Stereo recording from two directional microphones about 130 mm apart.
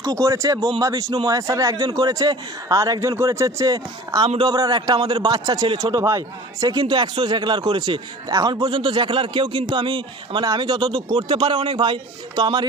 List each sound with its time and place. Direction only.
0.0 s a man's voice: 25° right (ahead or behind)